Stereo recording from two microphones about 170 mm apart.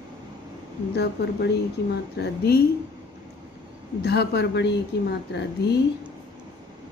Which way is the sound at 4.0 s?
75° left (ahead or behind).